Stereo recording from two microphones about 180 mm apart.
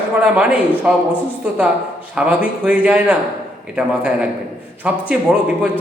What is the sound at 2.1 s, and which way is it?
A man's voice, 5° right (ahead or behind).